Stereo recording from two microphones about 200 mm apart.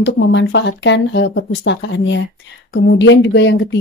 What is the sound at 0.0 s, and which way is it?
Speech, 60° left (ahead or behind).